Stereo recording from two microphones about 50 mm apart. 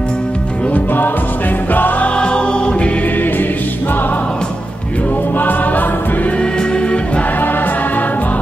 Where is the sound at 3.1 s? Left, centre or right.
Left.